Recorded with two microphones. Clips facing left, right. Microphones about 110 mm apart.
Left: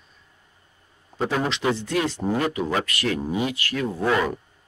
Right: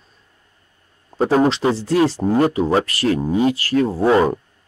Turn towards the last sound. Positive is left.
turn(degrees=-30)  # may be behind; listen again after turning